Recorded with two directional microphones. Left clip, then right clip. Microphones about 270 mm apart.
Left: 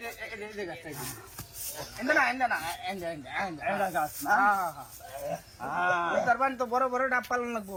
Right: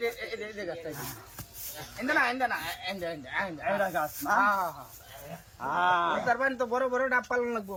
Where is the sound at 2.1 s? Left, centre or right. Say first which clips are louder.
Left 1 dB; centre.